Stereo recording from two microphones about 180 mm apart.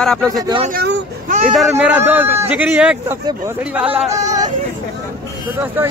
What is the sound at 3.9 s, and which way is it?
Speech, 40° right (ahead or behind).